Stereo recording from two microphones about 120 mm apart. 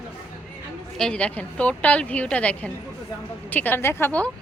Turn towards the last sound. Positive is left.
turn(degrees=10)  # may be behind; listen again after turning